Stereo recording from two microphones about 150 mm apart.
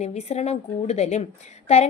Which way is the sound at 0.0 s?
50° left (ahead or behind).